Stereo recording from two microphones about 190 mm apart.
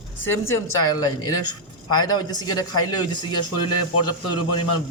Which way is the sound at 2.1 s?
20° left (ahead or behind).